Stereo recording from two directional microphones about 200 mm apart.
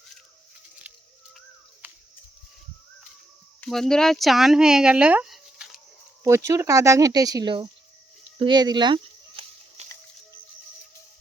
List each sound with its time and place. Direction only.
3.6 s speech: centre (ahead or behind)
6.2 s speech: 15° right (ahead or behind)
8.4 s a sound: 20° right (ahead or behind)